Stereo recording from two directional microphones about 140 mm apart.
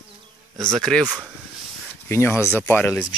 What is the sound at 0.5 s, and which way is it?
Speech, 5° left (ahead or behind).